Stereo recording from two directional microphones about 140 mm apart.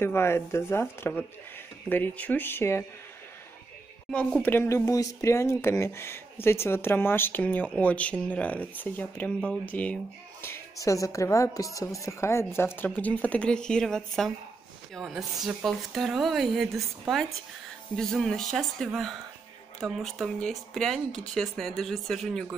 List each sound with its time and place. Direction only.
0.0 s speech: 15° left (ahead or behind)
4.1 s a woman's voice: 10° left (ahead or behind)